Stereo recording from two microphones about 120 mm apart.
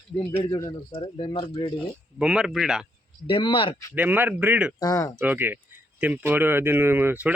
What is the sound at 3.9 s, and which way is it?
Speech, 15° right (ahead or behind).